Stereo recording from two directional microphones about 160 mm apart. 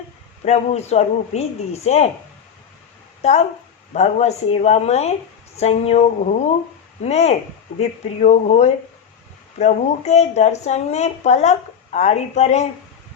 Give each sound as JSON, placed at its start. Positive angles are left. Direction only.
{"t": 0.4, "sound": "a woman's voice", "side_deg": 45}
{"t": 3.2, "sound": "a woman's voice", "side_deg": 45}
{"t": 7.0, "sound": "a woman's voice", "side_deg": 45}